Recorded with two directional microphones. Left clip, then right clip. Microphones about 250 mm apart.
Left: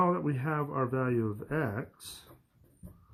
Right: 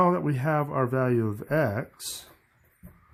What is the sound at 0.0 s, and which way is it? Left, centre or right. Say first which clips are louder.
Speech: right 5 dB; right.